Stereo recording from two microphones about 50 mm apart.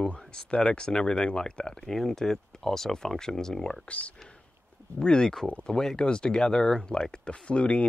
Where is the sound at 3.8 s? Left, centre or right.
Left.